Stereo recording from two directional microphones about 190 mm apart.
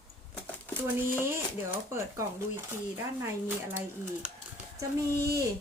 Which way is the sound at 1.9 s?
15° right (ahead or behind).